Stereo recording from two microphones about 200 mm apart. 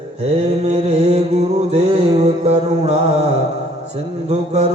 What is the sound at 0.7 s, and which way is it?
Mantra, 35° right (ahead or behind).